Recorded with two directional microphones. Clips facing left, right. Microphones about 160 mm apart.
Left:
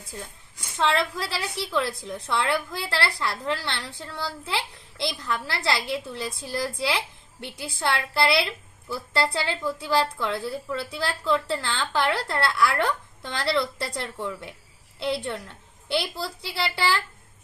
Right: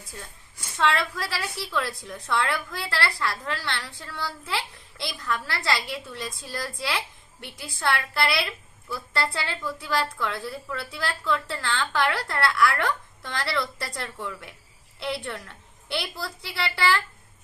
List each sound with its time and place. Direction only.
0.8 s a woman's voice: 25° left (ahead or behind)